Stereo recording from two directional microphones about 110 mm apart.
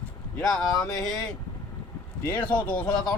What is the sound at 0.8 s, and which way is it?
Speech, 35° left (ahead or behind).